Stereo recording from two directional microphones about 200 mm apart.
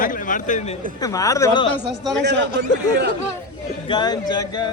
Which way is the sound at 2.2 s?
60° right (ahead or behind).